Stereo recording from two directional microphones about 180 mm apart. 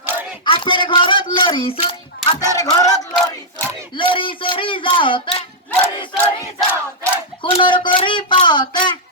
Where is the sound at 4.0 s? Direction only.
30° left (ahead or behind).